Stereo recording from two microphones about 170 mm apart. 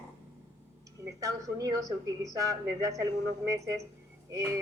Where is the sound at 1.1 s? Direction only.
20° right (ahead or behind).